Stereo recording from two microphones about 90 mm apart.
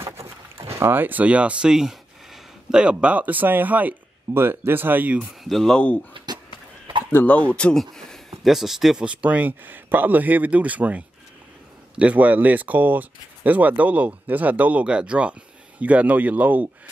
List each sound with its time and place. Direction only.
0.6 s speech: 30° right (ahead or behind)
5.4 s speech: centre (ahead or behind)
6.1 s a sound: 55° right (ahead or behind)
7.1 s speech: 20° left (ahead or behind); by 16.6 s 15° right (ahead or behind)